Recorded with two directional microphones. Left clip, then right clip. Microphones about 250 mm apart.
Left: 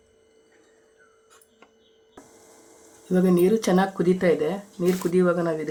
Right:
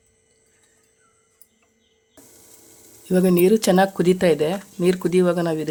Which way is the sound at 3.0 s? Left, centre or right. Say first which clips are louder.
Right 3 dB; right.